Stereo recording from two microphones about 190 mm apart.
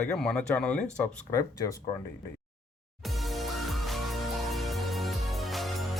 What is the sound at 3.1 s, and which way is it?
Music, centre (ahead or behind).